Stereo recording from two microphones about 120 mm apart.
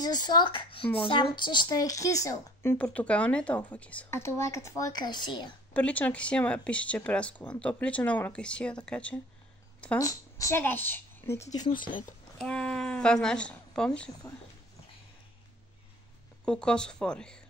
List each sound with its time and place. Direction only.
0.0 s speech: 35° left (ahead or behind)
5.7 s speech: 10° left (ahead or behind)
9.9 s a woman's voice: 25° left (ahead or behind)
10.6 s a woman's voice: 15° left (ahead or behind)
11.5 s speech: 35° left (ahead or behind)
12.4 s a woman's voice: 10° left (ahead or behind)
16.4 s speech: 5° left (ahead or behind)